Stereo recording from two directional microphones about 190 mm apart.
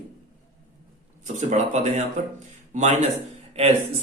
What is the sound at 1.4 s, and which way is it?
Speech, 40° right (ahead or behind).